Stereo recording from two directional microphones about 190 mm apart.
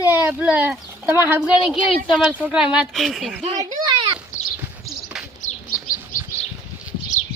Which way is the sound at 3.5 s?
20° right (ahead or behind).